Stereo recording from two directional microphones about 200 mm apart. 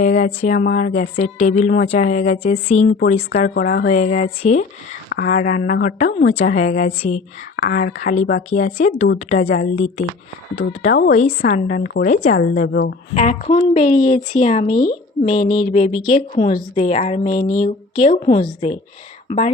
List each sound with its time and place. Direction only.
0.0 s speech: 40° left (ahead or behind)
3.5 s speech: 50° left (ahead or behind)
5.0 s a sound: 55° left (ahead or behind)
5.4 s speech: 40° left (ahead or behind)
6.1 s speech: 30° left (ahead or behind)
12.6 s a woman's voice: 55° left (ahead or behind)
13.1 s a woman's voice: 35° left (ahead or behind)